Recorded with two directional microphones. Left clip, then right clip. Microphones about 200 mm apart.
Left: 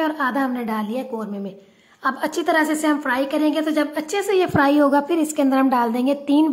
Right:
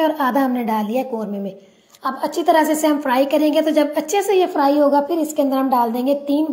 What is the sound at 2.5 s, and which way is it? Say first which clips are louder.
A woman's voice: right 4 dB; 5° right (ahead or behind).